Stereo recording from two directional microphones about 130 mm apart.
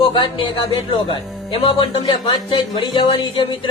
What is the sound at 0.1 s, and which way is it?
Speech, 40° left (ahead or behind).